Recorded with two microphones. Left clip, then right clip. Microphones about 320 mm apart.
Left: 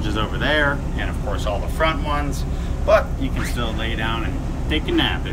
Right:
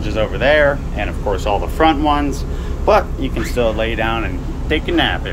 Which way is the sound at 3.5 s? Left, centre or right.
Centre.